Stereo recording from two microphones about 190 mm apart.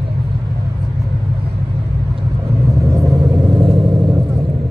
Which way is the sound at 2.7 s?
15° right (ahead or behind).